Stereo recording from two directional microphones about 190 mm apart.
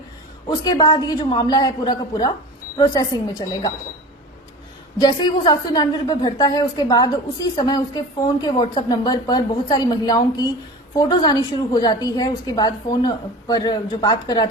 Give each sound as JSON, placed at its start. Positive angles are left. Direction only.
{"t": 0.4, "sound": "a woman's voice", "side_deg": 20}
{"t": 4.9, "sound": "a woman's voice", "side_deg": 20}